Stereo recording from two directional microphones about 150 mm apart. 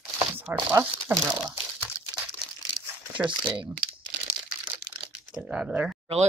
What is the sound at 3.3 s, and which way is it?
Speech, 30° right (ahead or behind).